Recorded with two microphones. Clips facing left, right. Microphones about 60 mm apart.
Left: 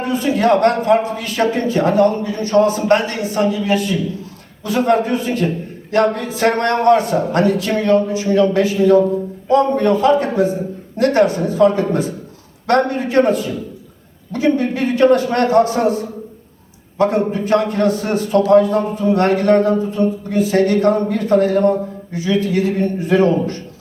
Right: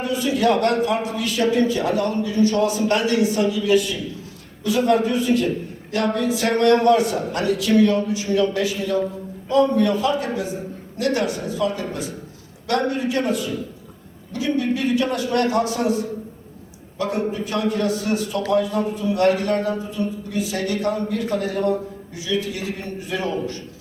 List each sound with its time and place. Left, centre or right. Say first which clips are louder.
0.0 s a man's voice: left 4 dB; left